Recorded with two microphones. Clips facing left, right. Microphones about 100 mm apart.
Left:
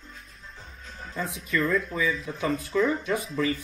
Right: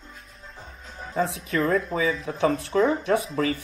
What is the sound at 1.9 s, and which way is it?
Speech, 35° right (ahead or behind).